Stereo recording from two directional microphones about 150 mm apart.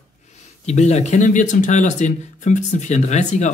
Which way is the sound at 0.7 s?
50° left (ahead or behind).